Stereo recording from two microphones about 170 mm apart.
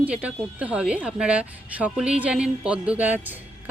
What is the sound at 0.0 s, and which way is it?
A woman's voice, 10° right (ahead or behind).